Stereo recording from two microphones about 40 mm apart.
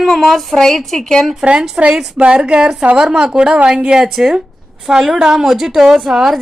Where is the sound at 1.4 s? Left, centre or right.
Right; by 6.4 s centre.